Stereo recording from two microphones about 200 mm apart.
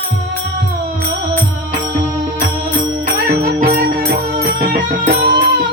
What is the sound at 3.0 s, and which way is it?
Music, 50° right (ahead or behind).